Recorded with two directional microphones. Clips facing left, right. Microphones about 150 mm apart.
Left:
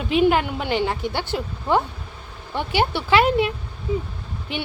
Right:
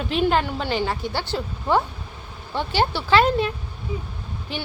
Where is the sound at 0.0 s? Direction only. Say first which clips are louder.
Left 3 dB; 10° left (ahead or behind).